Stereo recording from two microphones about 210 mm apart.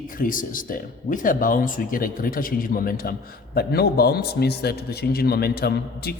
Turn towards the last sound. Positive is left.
turn(degrees=50)  # may be behind; listen again after turning